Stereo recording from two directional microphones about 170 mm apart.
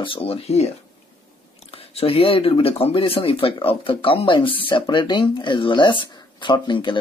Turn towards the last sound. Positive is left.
turn(degrees=25)  # may be behind; listen again after turning